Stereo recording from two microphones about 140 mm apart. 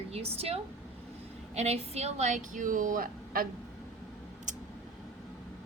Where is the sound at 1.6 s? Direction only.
50° right (ahead or behind); by 3.4 s 90° right.